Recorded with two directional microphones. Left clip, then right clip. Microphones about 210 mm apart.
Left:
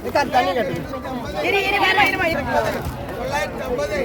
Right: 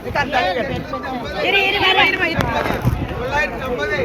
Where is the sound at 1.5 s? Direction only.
55° left (ahead or behind).